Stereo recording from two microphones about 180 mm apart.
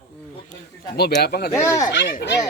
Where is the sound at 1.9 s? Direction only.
75° left (ahead or behind).